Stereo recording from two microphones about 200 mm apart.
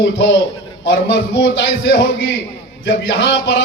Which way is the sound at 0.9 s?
65° left (ahead or behind).